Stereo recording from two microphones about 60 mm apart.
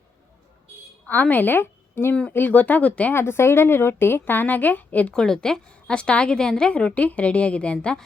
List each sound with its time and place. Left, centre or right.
1.0 s a woman's voice: left
2.3 s a woman's voice: left
3.2 s a woman's voice: left
5.1 s a woman's voice: centre